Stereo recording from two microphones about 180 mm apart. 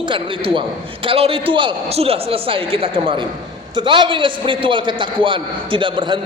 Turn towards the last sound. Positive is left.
turn(degrees=-25)  # may be behind; listen again after turning